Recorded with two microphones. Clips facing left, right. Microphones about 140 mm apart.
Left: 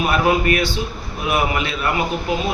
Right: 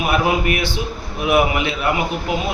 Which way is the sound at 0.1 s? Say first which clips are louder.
Even; 15° right (ahead or behind).